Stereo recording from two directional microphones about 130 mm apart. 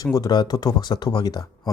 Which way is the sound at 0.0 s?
30° left (ahead or behind).